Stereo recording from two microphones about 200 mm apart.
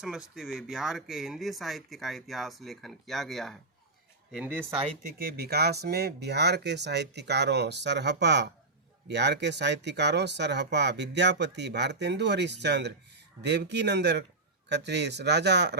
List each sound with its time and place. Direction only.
0.0 s speech: centre (ahead or behind)
5.2 s speech: 50° right (ahead or behind)